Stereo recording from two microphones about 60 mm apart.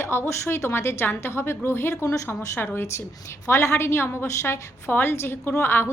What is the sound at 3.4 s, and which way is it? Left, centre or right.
A woman's voice, left.